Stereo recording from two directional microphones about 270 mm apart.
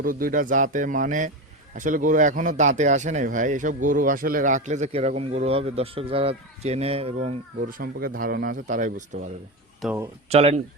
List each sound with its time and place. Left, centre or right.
0.0 s speech: right
9.8 s speech: centre
10.2 s speech: right